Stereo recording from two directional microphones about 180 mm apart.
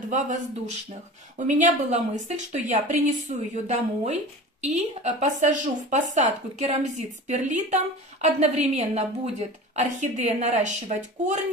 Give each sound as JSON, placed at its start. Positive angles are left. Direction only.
{"t": 0.1, "sound": "a woman's voice", "side_deg": -40}